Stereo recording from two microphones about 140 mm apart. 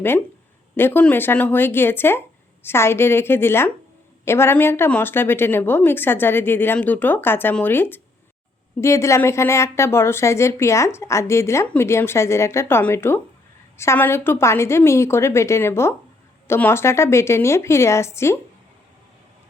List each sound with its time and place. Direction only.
0.8 s a woman's voice: 15° left (ahead or behind)